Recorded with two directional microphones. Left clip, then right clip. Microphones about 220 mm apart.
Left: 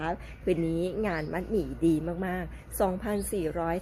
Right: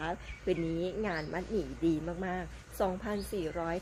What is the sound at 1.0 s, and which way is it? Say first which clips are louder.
A woman's voice: left 4 dB; 35° left (ahead or behind).